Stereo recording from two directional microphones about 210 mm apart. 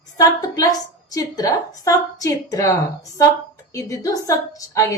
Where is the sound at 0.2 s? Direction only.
15° left (ahead or behind).